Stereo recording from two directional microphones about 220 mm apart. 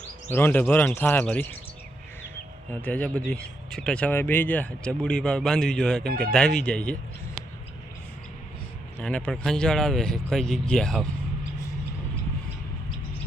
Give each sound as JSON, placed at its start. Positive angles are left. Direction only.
{"t": 0.3, "sound": "speech", "side_deg": 10}
{"t": 2.8, "sound": "speech", "side_deg": 5}
{"t": 6.1, "sound": "speech", "side_deg": -45}
{"t": 6.3, "sound": "speech", "side_deg": 5}
{"t": 9.0, "sound": "speech", "side_deg": 5}